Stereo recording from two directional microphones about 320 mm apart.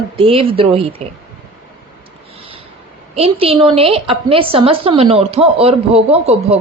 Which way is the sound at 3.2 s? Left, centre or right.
Centre.